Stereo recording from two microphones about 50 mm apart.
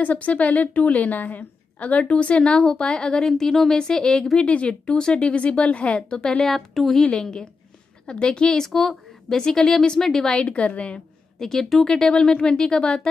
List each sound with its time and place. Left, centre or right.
0.0 s a woman's voice: left
6.4 s speech: centre
7.0 s a woman's voice: centre
10.4 s a woman's voice: left
11.3 s a woman's voice: centre